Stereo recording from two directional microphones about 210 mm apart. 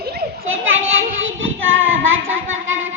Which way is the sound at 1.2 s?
65° right (ahead or behind).